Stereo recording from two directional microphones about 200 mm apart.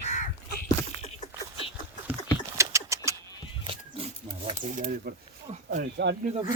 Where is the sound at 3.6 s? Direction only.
25° right (ahead or behind).